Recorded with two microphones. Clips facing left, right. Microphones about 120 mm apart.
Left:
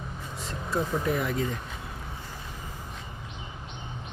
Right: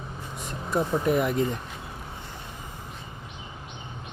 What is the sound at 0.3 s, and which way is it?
Speech, 15° right (ahead or behind).